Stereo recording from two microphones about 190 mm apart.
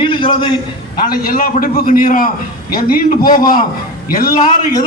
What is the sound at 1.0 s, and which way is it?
A man's voice, 50° left (ahead or behind).